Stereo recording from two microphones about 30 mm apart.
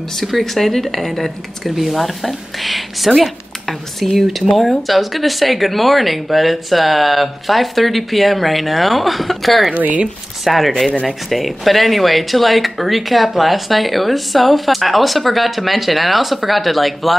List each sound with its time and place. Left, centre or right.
0.3 s speech: centre
9.8 s speech: right
10.4 s speech: centre